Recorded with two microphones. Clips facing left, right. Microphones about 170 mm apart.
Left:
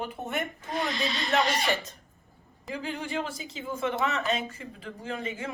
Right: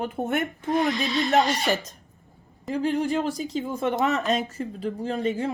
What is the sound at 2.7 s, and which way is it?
Speech, 40° right (ahead or behind).